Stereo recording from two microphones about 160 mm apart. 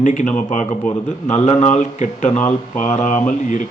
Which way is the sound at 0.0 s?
50° left (ahead or behind).